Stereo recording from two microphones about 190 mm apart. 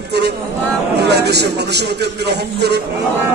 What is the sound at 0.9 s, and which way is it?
A man's voice, 60° right (ahead or behind).